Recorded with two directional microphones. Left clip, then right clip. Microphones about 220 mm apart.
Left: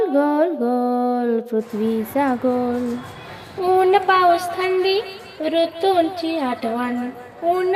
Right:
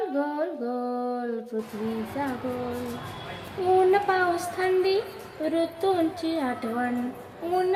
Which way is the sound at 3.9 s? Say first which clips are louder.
Left 8 dB; 35° left (ahead or behind).